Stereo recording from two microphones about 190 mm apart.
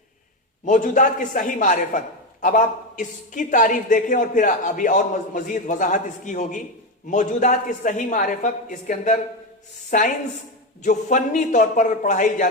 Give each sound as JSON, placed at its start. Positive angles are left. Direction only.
{"t": 0.6, "sound": "a man's voice", "side_deg": 40}